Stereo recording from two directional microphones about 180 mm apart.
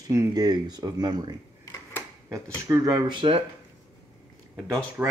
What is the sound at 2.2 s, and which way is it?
Speech, 15° right (ahead or behind).